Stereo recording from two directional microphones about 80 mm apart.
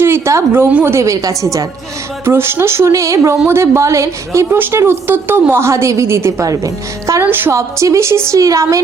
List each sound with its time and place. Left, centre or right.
0.0 s a woman's voice: right
2.2 s a woman's voice: right
4.5 s a woman's voice: right
7.2 s speech: right
7.5 s a woman's voice: right